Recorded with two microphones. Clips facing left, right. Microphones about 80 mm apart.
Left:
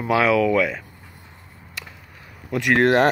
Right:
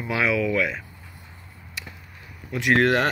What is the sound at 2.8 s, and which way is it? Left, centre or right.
Speech, left.